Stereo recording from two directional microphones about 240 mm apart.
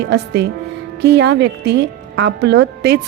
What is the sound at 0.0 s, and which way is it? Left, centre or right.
A woman's voice, right.